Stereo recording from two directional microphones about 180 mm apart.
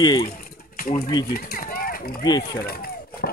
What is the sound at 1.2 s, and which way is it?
Speech, 55° left (ahead or behind).